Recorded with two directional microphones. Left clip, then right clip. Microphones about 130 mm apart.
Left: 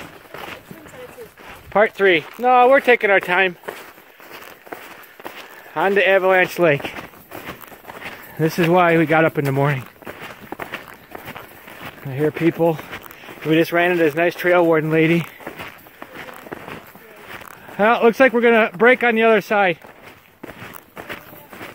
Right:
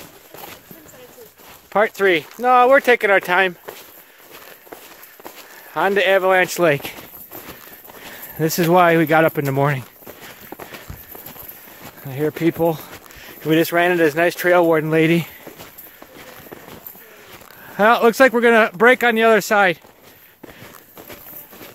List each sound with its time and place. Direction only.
1.7 s speech: 30° right (ahead or behind)
5.8 s speech: 35° right (ahead or behind)
8.4 s speech: 35° right (ahead or behind)
10.0 s walk: centre (ahead or behind)
12.1 s speech: 25° right (ahead or behind)
12.4 s speech: 35° right (ahead or behind)
15.4 s walk: centre (ahead or behind)
17.7 s speech: 45° right (ahead or behind)
21.0 s walk: centre (ahead or behind)